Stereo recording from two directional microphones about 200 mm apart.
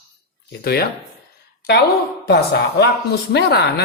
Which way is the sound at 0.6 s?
50° left (ahead or behind).